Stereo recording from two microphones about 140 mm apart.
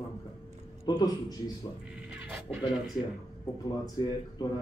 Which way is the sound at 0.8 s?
30° left (ahead or behind).